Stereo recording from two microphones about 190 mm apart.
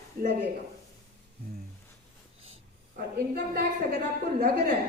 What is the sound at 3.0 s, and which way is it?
A woman's voice, 50° right (ahead or behind).